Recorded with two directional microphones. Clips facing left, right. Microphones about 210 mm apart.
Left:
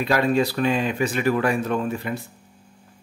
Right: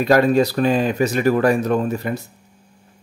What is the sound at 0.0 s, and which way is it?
Speech, 40° right (ahead or behind).